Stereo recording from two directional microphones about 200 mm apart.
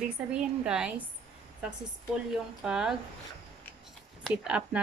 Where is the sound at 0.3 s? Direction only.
5° right (ahead or behind).